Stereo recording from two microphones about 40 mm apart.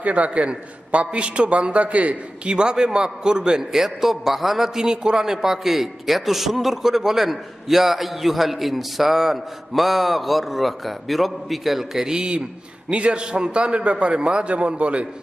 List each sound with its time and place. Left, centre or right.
0.0 s a man's voice: right